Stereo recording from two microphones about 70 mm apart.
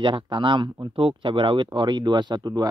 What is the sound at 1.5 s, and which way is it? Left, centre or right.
Speech, right.